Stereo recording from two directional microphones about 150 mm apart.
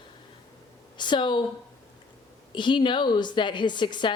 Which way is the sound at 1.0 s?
30° left (ahead or behind).